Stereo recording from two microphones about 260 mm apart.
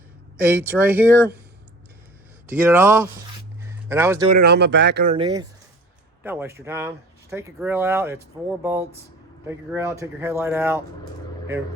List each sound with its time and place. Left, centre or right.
0.5 s speech: centre
2.5 s speech: centre
3.6 s a sound: centre
4.3 s speech: right
5.1 s speech: centre